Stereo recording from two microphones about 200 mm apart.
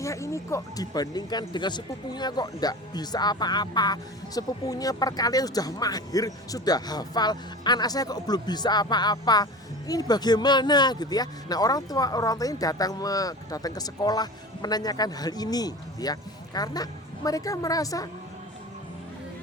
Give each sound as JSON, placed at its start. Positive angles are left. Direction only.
{"t": 0.0, "sound": "a woman's voice", "side_deg": 15}